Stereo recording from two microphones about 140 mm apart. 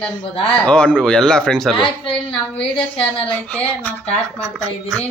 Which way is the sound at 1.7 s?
35° left (ahead or behind).